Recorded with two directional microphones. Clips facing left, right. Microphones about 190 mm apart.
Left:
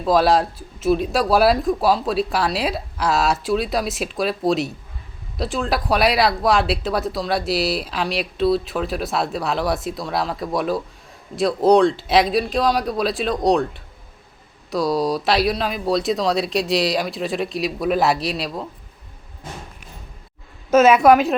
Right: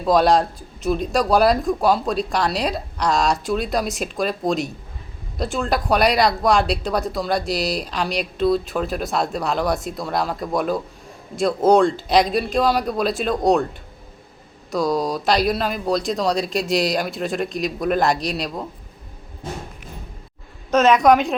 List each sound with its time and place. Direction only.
0.0 s speech: centre (ahead or behind)
14.7 s speech: centre (ahead or behind)
20.7 s speech: 5° left (ahead or behind)